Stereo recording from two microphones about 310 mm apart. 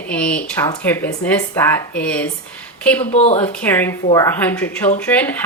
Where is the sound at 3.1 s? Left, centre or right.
Left.